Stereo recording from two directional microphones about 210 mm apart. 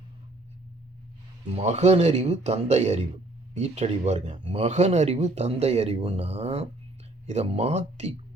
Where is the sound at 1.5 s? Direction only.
30° right (ahead or behind).